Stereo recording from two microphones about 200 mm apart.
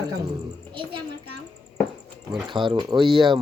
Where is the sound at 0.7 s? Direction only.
25° right (ahead or behind).